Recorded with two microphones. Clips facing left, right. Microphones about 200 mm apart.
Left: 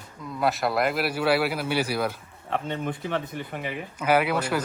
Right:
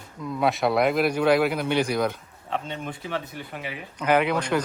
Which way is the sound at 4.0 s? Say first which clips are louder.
Right 1 dB; 5° left (ahead or behind).